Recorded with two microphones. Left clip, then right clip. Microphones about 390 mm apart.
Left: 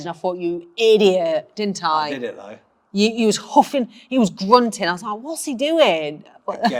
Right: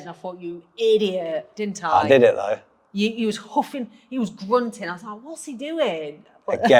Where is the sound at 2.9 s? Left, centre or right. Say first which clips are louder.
Left 6 dB; left.